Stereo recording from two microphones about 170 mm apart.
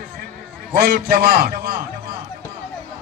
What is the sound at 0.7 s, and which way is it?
Speech, 55° right (ahead or behind).